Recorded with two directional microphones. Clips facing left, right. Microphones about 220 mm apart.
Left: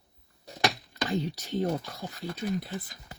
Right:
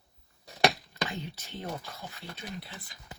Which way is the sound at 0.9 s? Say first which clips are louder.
Left 6 dB; 40° left (ahead or behind).